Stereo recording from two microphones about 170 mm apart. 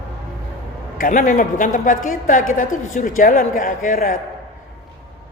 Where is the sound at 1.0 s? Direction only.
50° left (ahead or behind).